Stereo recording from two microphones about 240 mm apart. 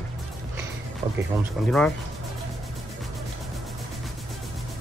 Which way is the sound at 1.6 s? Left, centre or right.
Centre.